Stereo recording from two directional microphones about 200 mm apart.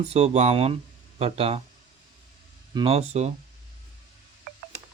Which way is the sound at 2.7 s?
30° right (ahead or behind).